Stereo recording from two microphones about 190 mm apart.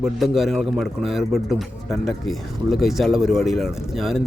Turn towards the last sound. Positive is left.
turn(degrees=0)  # may be behind; listen again after turning